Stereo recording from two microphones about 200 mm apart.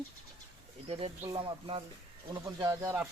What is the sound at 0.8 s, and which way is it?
Speech, 25° right (ahead or behind).